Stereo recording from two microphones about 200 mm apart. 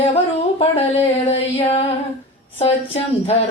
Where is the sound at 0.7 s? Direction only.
30° left (ahead or behind).